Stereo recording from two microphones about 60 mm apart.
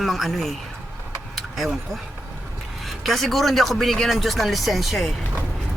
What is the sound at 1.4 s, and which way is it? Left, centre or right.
Vehicle, centre.